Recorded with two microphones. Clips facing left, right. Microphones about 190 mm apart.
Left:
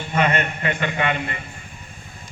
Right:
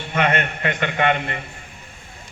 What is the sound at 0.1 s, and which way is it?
A man's voice, 60° right (ahead or behind).